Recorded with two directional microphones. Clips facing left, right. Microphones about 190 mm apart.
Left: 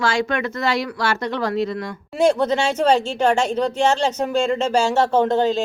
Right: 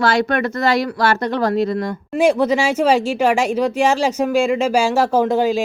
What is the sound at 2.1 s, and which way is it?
A woman's voice, 10° right (ahead or behind).